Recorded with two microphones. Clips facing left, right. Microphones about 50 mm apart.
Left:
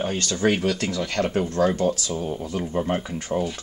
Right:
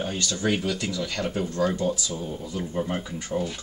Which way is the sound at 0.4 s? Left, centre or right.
Left.